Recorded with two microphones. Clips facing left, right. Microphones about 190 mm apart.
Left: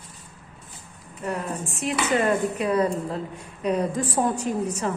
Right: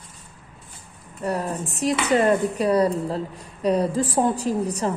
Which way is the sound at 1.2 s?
40° right (ahead or behind).